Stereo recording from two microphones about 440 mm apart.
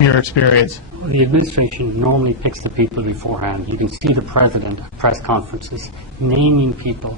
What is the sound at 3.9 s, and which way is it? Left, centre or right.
Speech, right.